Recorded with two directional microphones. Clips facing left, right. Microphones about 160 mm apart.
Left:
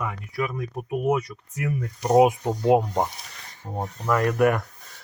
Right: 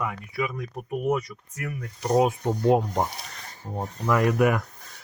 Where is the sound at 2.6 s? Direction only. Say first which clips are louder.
Left 2 dB; 5° left (ahead or behind).